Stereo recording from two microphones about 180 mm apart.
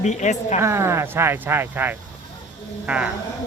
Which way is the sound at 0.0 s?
40° left (ahead or behind).